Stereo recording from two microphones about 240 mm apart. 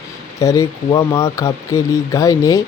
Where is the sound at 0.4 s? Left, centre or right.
Centre.